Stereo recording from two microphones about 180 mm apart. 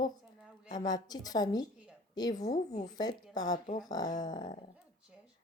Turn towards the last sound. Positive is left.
turn(degrees=45)  # may be behind; listen again after turning